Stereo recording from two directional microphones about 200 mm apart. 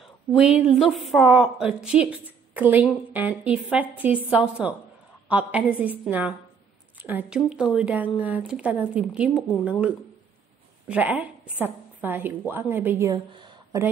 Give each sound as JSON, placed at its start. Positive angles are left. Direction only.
{"t": 0.0, "sound": "a woman's voice", "side_deg": 0}
{"t": 13.1, "sound": "speech", "side_deg": -20}